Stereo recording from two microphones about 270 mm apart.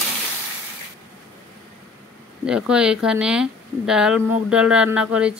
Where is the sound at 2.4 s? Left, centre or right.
Centre.